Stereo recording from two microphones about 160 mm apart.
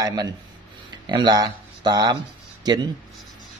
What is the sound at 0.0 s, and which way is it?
Speech, 25° right (ahead or behind).